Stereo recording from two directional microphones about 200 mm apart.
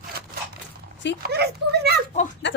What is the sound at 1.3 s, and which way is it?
Speech, 55° right (ahead or behind).